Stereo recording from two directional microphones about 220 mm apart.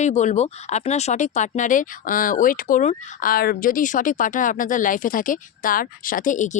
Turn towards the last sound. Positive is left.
turn(degrees=35)  # may be behind; listen again after turning